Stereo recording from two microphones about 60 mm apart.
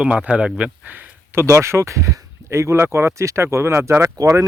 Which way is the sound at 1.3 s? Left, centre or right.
Right.